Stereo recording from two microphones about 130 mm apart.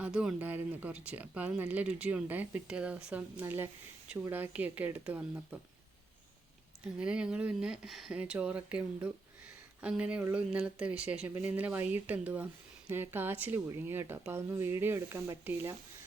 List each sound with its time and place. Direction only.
0.0 s speech: 5° right (ahead or behind)
6.8 s speech: 10° right (ahead or behind)